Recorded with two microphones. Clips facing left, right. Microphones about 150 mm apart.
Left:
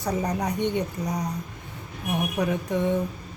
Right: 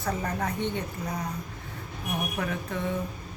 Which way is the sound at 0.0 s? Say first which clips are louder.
Left 4 dB; 15° left (ahead or behind).